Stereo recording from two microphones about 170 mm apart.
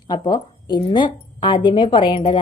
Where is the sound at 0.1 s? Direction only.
25° left (ahead or behind).